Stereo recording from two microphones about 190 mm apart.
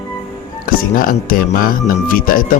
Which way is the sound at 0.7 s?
50° left (ahead or behind).